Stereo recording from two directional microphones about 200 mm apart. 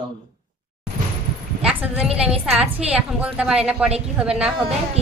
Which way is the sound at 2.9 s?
5° right (ahead or behind).